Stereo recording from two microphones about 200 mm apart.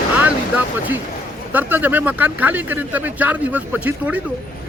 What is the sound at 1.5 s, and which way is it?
Speech, 10° right (ahead or behind).